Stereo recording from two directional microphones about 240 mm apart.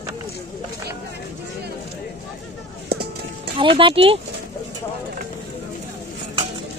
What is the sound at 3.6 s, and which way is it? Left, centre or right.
Speech, right.